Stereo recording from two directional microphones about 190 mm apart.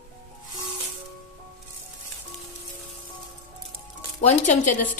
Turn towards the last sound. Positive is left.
turn(degrees=40)  # may be behind; listen again after turning